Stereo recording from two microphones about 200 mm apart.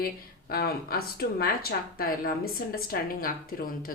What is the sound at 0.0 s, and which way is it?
Speech, 50° left (ahead or behind).